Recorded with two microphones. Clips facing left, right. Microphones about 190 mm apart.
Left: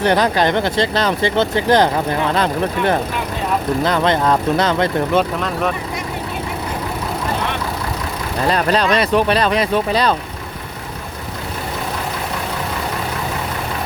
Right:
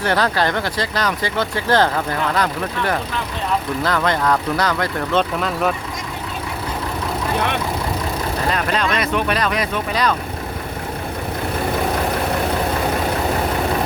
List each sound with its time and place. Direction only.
0.0 s speech: 20° left (ahead or behind)
8.5 s speech: 35° left (ahead or behind)